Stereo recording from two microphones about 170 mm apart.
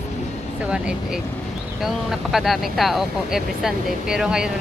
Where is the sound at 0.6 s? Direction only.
5° right (ahead or behind).